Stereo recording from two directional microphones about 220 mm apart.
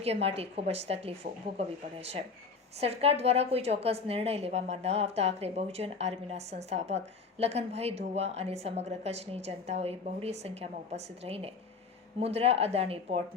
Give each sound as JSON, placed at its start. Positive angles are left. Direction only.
{"t": 0.0, "sound": "a woman's voice", "side_deg": -25}
{"t": 2.8, "sound": "a woman's voice", "side_deg": -25}